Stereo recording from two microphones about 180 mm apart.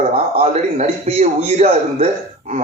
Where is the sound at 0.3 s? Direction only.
35° right (ahead or behind).